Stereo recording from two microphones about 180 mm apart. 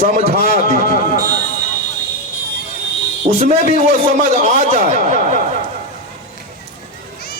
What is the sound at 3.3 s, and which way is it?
A man's voice, 35° right (ahead or behind).